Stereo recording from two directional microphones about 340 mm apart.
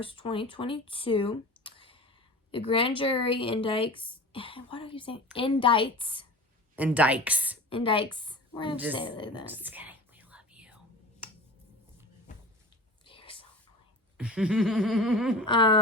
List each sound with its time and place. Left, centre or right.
0.0 s speech: centre
6.7 s speech: centre
7.7 s a woman's voice: centre
9.5 s whispering: centre
12.3 s a sound: left
13.1 s whispering: centre
14.2 s speech: centre
15.4 s speech: centre